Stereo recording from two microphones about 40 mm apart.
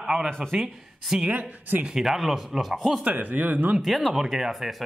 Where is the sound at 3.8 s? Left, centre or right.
Centre.